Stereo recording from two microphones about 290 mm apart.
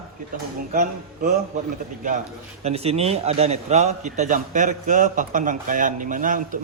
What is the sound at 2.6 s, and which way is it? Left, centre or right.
A man's voice, right.